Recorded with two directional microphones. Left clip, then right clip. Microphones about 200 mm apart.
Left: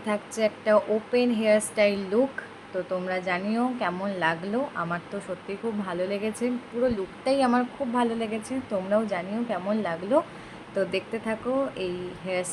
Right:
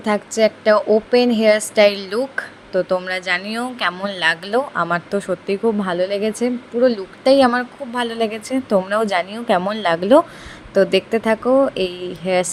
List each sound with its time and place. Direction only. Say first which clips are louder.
0.0 s a woman's voice: right 10 dB; 35° right (ahead or behind)